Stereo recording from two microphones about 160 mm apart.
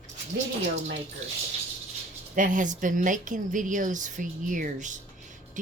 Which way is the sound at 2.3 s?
55° right (ahead or behind).